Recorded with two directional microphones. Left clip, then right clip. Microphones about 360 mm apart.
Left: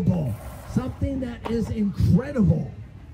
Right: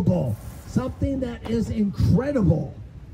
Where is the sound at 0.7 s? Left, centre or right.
Centre.